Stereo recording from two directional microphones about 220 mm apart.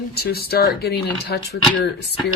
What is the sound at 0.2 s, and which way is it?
Speech, 45° left (ahead or behind).